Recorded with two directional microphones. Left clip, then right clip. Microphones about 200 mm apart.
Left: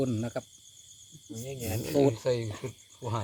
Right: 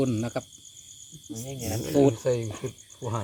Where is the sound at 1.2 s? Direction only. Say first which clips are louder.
Right 2 dB; 45° left (ahead or behind).